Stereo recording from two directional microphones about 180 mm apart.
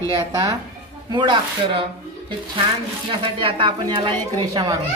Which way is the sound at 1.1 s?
25° right (ahead or behind).